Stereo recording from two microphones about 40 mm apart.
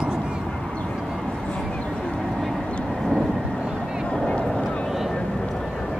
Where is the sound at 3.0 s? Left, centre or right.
Centre.